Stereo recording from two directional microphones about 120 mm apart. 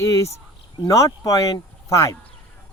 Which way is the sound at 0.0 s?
25° left (ahead or behind).